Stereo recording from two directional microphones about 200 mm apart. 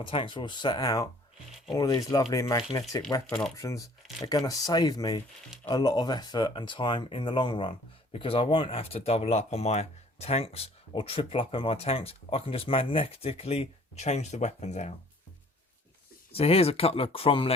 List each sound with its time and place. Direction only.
0.0 s speech: 25° left (ahead or behind)
16.3 s speech: 30° left (ahead or behind)